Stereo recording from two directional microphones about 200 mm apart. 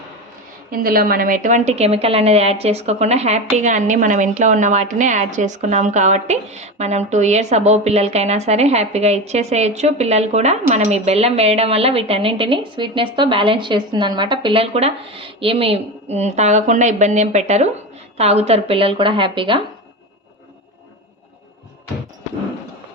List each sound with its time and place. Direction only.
0.7 s a woman's voice: 45° right (ahead or behind); by 19.5 s 25° right (ahead or behind)